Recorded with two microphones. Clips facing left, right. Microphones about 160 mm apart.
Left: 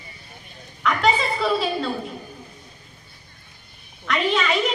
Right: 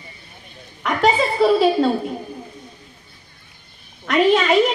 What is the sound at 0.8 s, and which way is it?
A woman's voice, 40° right (ahead or behind).